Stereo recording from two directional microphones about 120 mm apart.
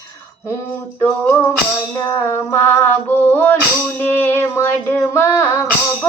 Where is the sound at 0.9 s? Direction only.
20° left (ahead or behind).